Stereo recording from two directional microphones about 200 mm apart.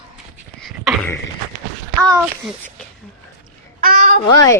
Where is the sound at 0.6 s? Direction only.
Centre (ahead or behind).